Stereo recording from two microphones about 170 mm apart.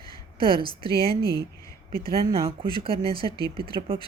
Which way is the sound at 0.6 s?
25° left (ahead or behind).